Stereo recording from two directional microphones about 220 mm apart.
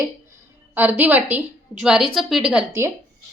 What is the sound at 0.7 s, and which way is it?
A woman's voice, 10° right (ahead or behind).